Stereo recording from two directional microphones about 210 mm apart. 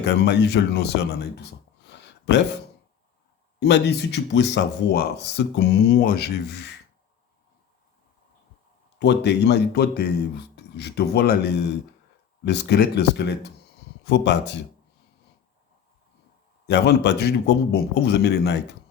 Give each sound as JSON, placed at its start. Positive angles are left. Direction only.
{"t": 0.0, "sound": "speech", "side_deg": 55}
{"t": 1.9, "sound": "a sound", "side_deg": 55}
{"t": 3.6, "sound": "speech", "side_deg": 55}
{"t": 9.0, "sound": "speech", "side_deg": 55}
{"t": 16.6, "sound": "speech", "side_deg": 55}